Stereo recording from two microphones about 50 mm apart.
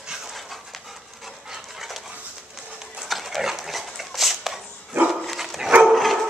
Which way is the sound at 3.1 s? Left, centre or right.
Centre.